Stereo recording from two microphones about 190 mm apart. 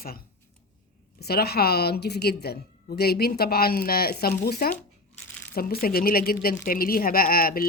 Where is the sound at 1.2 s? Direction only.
55° left (ahead or behind).